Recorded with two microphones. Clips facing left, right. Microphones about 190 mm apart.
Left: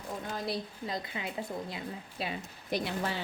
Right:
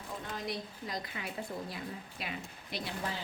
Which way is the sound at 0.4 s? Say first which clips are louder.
Left 4 dB; 25° left (ahead or behind).